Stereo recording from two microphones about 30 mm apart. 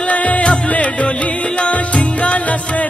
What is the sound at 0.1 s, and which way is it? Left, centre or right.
Music, left.